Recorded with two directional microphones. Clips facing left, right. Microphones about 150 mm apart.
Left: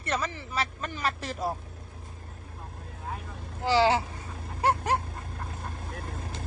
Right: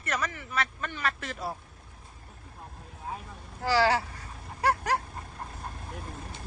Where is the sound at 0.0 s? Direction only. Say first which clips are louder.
Left 2 dB; 30° left (ahead or behind).